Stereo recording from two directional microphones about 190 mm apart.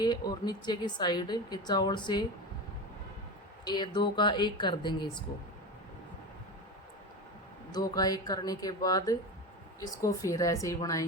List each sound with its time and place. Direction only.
0.0 s a woman's voice: 20° left (ahead or behind)
3.6 s a woman's voice: 25° left (ahead or behind)
7.7 s a woman's voice: 20° left (ahead or behind)